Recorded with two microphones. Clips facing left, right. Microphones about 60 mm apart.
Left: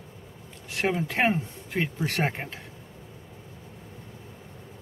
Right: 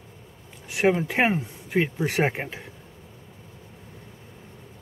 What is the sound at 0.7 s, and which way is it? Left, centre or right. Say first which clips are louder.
Speech: right 5 dB; centre.